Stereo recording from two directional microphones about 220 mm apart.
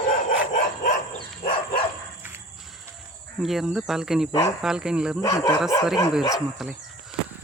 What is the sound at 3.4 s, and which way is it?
Speech, centre (ahead or behind).